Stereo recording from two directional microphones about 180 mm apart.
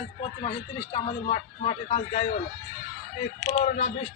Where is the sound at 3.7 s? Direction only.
30° left (ahead or behind).